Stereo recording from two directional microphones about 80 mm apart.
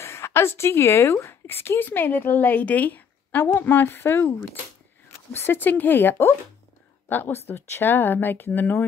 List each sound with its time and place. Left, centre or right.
0.0 s a woman's voice: left